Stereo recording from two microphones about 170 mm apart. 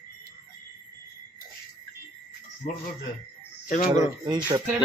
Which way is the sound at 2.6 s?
50° left (ahead or behind).